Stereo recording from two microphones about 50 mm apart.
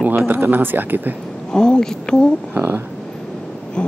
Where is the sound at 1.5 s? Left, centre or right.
Centre.